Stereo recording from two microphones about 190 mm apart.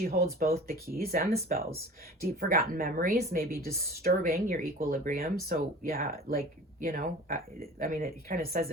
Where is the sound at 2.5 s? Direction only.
50° right (ahead or behind).